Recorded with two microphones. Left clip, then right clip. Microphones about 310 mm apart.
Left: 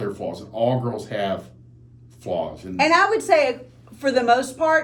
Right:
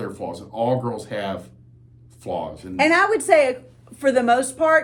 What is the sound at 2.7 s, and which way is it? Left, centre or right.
Speech, right.